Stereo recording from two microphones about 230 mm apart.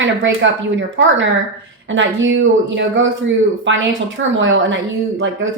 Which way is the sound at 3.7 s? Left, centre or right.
Right.